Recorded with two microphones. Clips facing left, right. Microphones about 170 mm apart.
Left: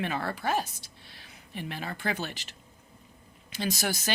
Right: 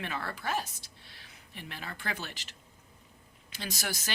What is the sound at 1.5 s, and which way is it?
Speech, 20° left (ahead or behind).